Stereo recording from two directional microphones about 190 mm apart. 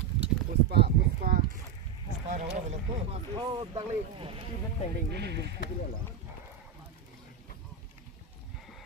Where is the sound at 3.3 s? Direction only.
25° right (ahead or behind).